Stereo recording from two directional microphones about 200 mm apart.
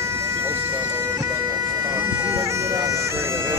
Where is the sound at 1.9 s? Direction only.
15° right (ahead or behind).